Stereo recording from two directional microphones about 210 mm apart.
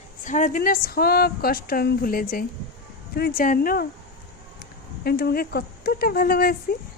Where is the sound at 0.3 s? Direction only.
35° left (ahead or behind).